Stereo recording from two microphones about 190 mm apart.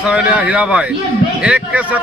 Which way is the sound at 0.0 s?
5° right (ahead or behind).